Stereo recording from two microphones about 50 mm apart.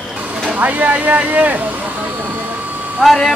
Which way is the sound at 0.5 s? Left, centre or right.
Right.